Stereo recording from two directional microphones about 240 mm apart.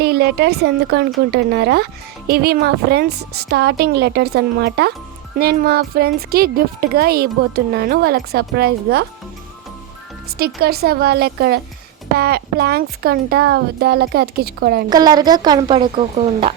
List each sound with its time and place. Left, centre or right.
0.0 s speech: right
10.3 s speech: right
14.8 s speech: centre